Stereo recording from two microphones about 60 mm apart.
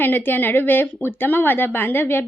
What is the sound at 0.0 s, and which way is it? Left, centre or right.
Speech, left.